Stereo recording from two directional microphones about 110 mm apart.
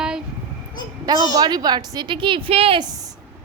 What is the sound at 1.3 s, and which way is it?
A woman's voice, 40° right (ahead or behind).